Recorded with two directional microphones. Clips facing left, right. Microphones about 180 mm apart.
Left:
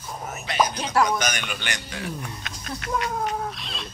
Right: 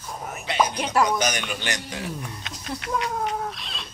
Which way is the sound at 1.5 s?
40° right (ahead or behind).